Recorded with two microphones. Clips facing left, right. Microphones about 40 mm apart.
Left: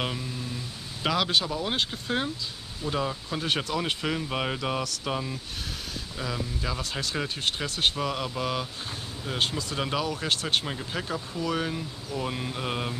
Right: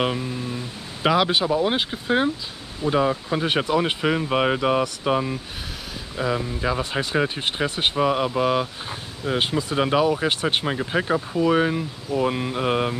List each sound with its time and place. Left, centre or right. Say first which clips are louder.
0.0 s speech: right 8 dB; right